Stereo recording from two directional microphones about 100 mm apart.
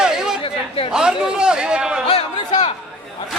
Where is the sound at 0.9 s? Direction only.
5° right (ahead or behind).